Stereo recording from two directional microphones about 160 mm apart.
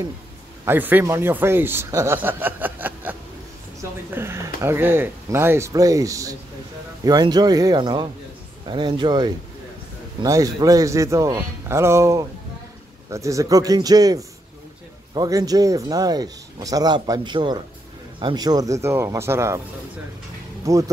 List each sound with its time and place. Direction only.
0.7 s a man's voice: 10° right (ahead or behind)
20.6 s a man's voice: 20° right (ahead or behind)